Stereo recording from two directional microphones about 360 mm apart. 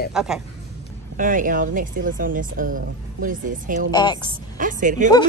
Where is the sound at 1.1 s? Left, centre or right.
Right.